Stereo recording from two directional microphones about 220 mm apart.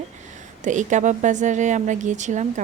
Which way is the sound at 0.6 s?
35° right (ahead or behind).